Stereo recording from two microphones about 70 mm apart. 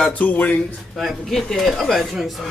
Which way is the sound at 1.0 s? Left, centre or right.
Centre.